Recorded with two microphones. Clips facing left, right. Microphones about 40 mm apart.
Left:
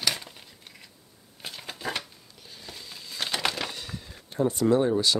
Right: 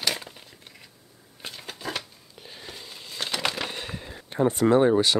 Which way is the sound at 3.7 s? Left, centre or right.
Right.